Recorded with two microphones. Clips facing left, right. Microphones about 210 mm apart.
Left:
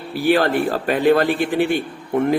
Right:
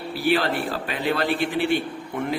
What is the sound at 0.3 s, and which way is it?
A man's voice, 50° left (ahead or behind).